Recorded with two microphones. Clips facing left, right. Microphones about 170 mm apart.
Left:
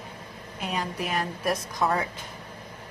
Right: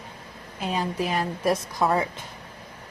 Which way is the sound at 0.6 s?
30° right (ahead or behind).